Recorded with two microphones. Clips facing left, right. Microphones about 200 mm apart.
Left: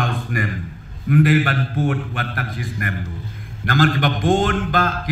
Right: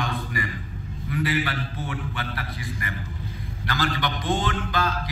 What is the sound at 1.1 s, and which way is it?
Mantra, 50° left (ahead or behind).